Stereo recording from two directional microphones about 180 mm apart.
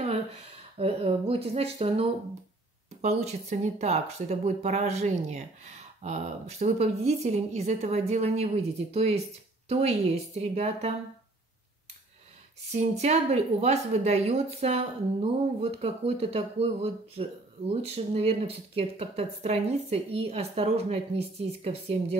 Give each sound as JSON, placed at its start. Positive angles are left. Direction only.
{"t": 0.7, "sound": "speech", "side_deg": -35}
{"t": 12.7, "sound": "speech", "side_deg": -35}